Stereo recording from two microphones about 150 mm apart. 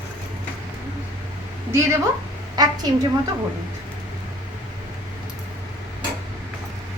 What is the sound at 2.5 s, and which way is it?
Speech, 25° right (ahead or behind).